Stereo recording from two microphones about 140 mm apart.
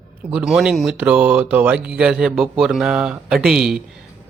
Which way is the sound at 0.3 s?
5° right (ahead or behind).